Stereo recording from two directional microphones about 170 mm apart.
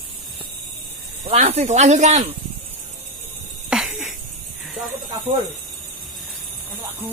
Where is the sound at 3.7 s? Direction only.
5° right (ahead or behind).